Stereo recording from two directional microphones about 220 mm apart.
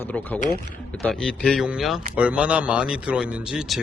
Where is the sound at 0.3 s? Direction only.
35° left (ahead or behind).